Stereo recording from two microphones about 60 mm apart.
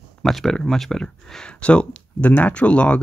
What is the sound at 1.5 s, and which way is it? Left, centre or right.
Speech, centre.